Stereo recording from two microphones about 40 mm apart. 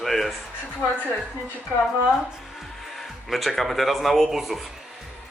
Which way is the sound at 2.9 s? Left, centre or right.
Centre.